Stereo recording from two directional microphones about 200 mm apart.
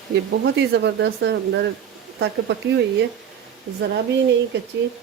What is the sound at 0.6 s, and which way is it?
Speech, 60° right (ahead or behind).